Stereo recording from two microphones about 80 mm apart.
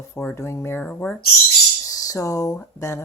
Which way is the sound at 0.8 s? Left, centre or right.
Centre.